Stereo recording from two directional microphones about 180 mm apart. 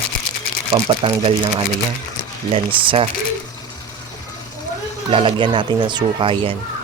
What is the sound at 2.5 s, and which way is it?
Speech, 30° right (ahead or behind).